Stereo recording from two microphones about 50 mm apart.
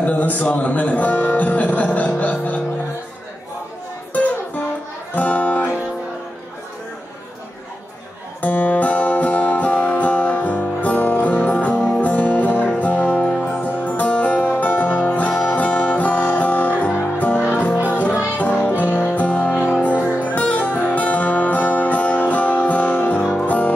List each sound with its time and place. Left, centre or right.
0.0 s speech: left
4.1 s music: left
8.4 s music: left
13.7 s music: left
14.5 s music: left